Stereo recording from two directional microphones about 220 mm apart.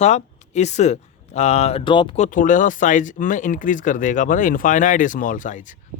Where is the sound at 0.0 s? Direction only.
30° left (ahead or behind).